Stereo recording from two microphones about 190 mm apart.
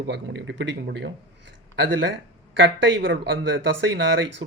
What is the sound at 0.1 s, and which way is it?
Speech, 65° right (ahead or behind).